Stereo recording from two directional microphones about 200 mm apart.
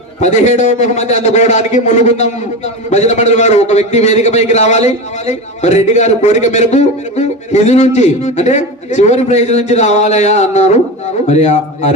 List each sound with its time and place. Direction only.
0.2 s a man's voice: 35° left (ahead or behind)